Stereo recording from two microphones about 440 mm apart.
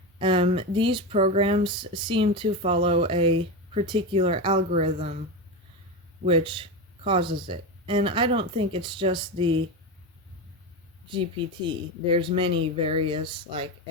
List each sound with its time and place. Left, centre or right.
0.2 s speech: centre
6.2 s speech: centre
11.1 s speech: centre